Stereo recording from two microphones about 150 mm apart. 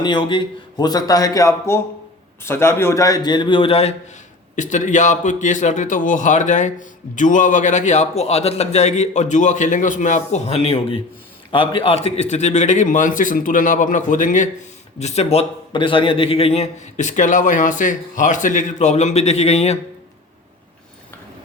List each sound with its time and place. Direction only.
0.0 s a man's voice: 30° left (ahead or behind)
4.5 s a man's voice: 55° left (ahead or behind)
14.9 s a man's voice: 45° left (ahead or behind)